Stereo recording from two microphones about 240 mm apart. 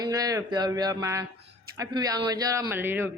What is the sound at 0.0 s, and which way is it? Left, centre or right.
Speech, centre.